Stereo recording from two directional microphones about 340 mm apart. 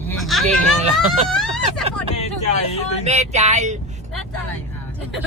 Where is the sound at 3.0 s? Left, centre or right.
Centre.